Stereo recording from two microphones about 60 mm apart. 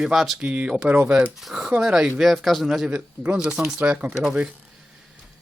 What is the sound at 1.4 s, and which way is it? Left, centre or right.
Speech, centre.